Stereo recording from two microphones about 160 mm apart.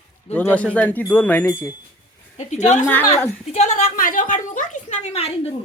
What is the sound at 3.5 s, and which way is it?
Speech, 40° left (ahead or behind).